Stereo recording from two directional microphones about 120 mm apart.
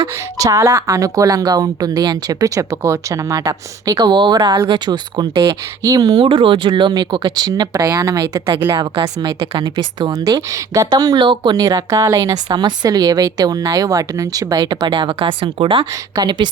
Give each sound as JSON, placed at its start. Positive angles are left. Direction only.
{"t": 0.3, "sound": "a woman's voice", "side_deg": -25}
{"t": 15.8, "sound": "a woman's voice", "side_deg": -35}